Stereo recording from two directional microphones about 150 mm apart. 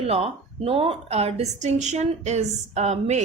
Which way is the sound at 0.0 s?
40° right (ahead or behind).